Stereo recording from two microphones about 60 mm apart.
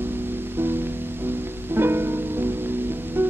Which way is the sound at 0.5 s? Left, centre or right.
Right.